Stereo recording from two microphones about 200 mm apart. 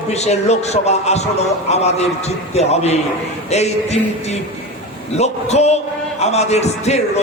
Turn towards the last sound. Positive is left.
turn(degrees=35)  # may be behind; listen again after turning